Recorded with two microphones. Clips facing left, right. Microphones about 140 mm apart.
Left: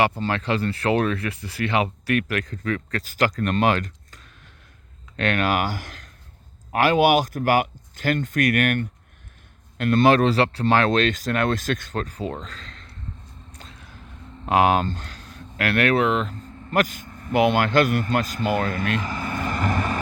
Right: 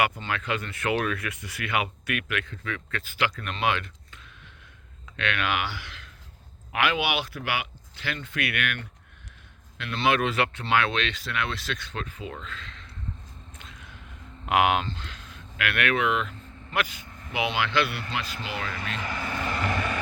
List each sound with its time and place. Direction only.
0.0 s speech: 35° left (ahead or behind)
13.6 s a sound: 35° left (ahead or behind)
14.4 s speech: 35° left (ahead or behind)